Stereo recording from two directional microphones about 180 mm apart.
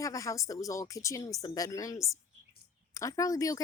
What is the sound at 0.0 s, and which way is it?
A woman's voice, 20° left (ahead or behind).